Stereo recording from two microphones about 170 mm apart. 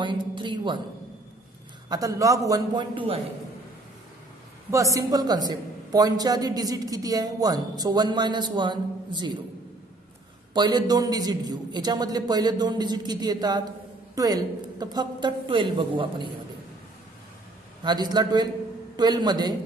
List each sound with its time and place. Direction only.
0.0 s a woman's voice: 30° right (ahead or behind)
1.9 s a woman's voice: 20° right (ahead or behind)
4.6 s a woman's voice: 20° right (ahead or behind)
10.5 s a woman's voice: 25° right (ahead or behind)
17.8 s a woman's voice: 25° right (ahead or behind)